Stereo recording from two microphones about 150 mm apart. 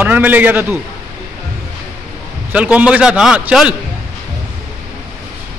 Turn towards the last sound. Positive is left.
turn(degrees=-5)  # may be behind; listen again after turning